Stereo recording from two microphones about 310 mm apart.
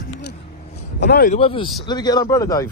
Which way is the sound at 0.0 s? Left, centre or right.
Left.